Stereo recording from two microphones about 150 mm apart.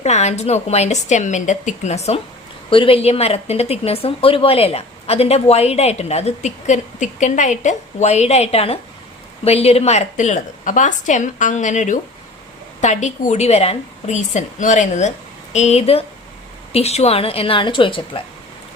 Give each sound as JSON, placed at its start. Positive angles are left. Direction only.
{"t": 0.0, "sound": "speech", "side_deg": 50}
{"t": 2.6, "sound": "a woman's voice", "side_deg": 35}